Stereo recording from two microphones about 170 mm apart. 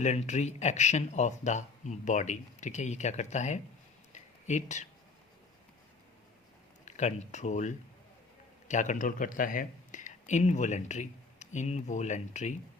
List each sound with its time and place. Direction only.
0.0 s speech: 40° left (ahead or behind)
4.1 s a sound: 45° left (ahead or behind)
6.8 s speech: 45° left (ahead or behind)